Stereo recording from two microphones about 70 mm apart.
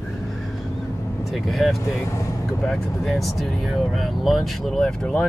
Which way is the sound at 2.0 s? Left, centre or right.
Left.